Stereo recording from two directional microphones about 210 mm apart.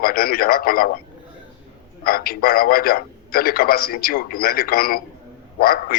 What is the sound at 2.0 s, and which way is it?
Speech, 45° left (ahead or behind).